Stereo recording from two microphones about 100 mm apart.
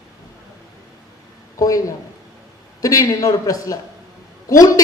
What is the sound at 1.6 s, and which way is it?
Speech, 35° left (ahead or behind).